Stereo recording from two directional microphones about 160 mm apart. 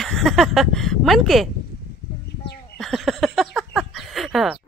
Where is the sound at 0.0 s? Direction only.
Centre (ahead or behind).